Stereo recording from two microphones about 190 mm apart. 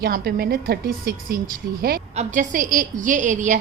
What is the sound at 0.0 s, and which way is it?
A woman's voice, 55° right (ahead or behind).